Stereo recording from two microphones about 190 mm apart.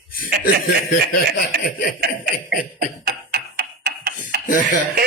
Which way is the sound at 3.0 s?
55° right (ahead or behind).